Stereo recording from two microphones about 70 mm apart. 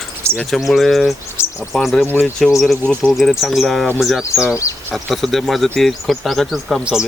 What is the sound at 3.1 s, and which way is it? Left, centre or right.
Speech, centre.